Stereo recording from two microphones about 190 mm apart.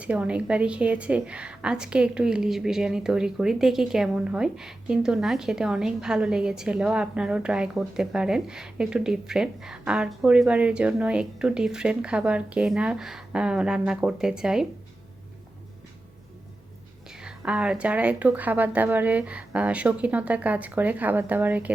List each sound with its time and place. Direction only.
0.0 s a woman's voice: 5° right (ahead or behind)
17.1 s speech: 5° right (ahead or behind)